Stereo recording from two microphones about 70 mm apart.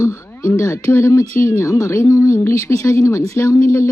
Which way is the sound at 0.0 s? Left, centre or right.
Left.